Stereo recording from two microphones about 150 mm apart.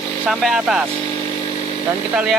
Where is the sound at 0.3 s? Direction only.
5° right (ahead or behind).